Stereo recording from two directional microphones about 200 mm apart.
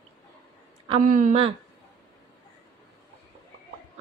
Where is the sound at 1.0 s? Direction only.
40° right (ahead or behind).